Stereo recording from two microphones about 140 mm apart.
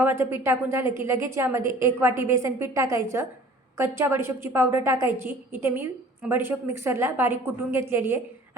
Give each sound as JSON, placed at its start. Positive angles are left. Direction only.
{"t": 0.0, "sound": "a woman's voice", "side_deg": -15}